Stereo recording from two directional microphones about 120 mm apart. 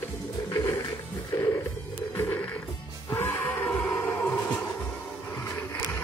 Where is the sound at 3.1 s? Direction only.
20° left (ahead or behind).